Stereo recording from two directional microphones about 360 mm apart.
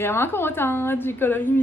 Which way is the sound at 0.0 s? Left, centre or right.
Centre.